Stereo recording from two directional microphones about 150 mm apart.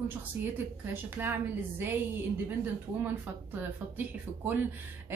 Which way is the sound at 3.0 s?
15° right (ahead or behind).